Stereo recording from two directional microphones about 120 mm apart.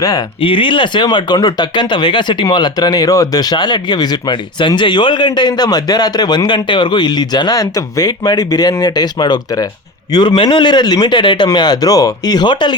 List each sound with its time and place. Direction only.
0.0 s speech: 30° left (ahead or behind)
0.4 s speech: 45° left (ahead or behind)